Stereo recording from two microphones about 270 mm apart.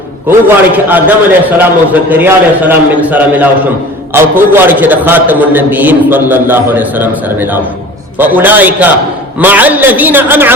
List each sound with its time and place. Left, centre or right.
0.3 s a man's voice: centre